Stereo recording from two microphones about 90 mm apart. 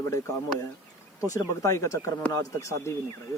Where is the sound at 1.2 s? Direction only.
35° left (ahead or behind).